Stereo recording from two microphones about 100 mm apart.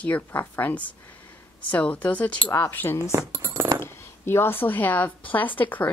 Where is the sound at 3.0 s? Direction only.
25° right (ahead or behind).